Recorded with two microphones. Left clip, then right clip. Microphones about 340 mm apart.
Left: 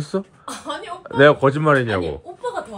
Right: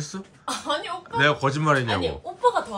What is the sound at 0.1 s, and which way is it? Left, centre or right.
Speech, centre.